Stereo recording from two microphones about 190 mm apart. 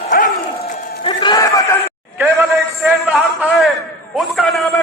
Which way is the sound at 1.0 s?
25° left (ahead or behind).